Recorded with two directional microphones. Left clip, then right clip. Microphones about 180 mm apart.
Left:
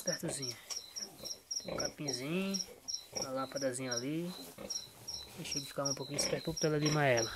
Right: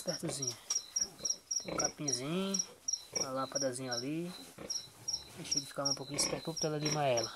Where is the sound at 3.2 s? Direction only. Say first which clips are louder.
Even; centre (ahead or behind).